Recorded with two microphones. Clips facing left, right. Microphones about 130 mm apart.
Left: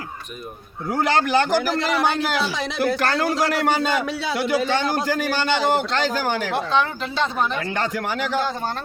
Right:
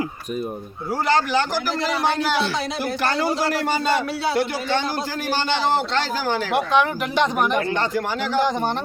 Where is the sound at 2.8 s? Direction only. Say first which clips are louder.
Left 4 dB; 55° left (ahead or behind).